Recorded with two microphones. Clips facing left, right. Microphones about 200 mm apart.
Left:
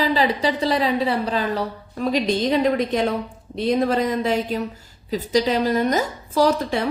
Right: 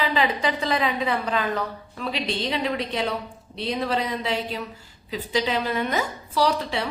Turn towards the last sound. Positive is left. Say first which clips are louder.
# left 4 dB
turn(degrees=45)  # may be behind; listen again after turning